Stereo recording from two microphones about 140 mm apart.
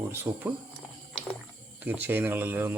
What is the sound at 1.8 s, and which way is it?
Speech, 10° right (ahead or behind).